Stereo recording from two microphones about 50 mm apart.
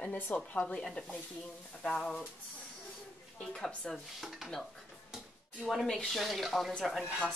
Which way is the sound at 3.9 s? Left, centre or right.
Centre.